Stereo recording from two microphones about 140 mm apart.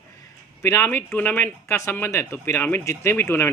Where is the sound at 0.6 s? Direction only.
15° left (ahead or behind).